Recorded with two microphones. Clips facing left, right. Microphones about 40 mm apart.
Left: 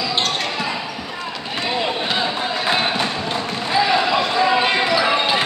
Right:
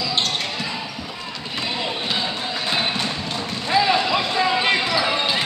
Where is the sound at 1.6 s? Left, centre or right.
Centre.